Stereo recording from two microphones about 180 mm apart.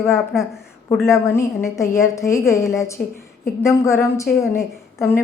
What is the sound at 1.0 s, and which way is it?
A woman's voice, 15° left (ahead or behind).